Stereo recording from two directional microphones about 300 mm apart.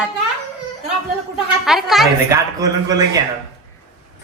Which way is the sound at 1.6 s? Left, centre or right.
Centre.